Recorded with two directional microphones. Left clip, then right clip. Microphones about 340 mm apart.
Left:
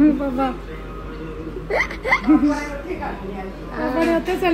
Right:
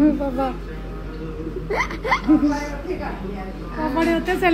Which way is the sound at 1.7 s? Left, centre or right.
Centre.